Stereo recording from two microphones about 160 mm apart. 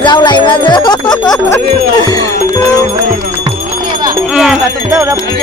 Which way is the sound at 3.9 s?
25° right (ahead or behind).